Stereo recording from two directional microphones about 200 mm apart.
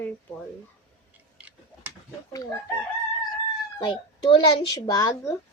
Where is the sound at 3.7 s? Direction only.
25° left (ahead or behind).